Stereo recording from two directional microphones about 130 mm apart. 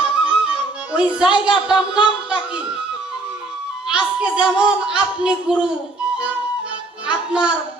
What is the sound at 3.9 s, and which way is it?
Speech, 5° right (ahead or behind).